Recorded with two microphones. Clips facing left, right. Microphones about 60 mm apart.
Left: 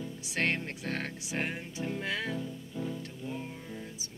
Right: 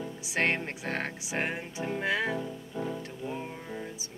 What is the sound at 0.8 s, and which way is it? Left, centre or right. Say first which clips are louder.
Music: right 3 dB; centre.